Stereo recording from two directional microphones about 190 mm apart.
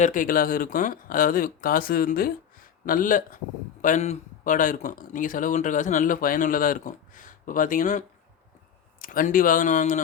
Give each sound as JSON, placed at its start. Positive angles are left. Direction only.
{"t": 0.0, "sound": "speech", "side_deg": 45}